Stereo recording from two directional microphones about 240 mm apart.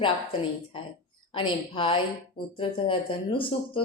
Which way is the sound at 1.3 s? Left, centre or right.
Left.